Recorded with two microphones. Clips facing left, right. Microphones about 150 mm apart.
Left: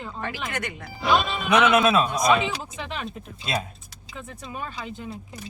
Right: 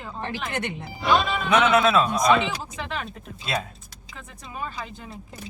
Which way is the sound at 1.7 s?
20° left (ahead or behind).